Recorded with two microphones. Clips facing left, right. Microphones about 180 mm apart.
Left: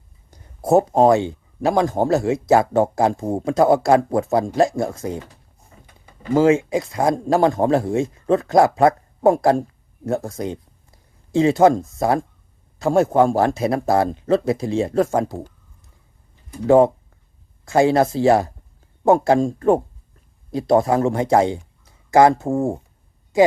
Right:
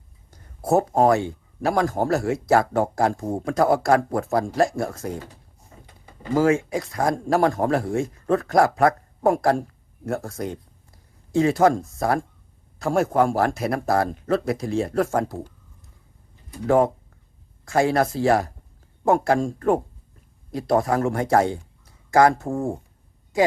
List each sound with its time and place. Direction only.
0.3 s speech: 20° left (ahead or behind)
6.3 s speech: 20° left (ahead or behind)
16.6 s speech: 25° left (ahead or behind)